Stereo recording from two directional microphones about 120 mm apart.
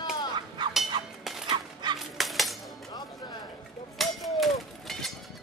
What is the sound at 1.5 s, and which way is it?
Dog, 35° right (ahead or behind).